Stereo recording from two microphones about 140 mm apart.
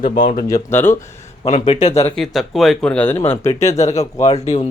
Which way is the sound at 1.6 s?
50° left (ahead or behind).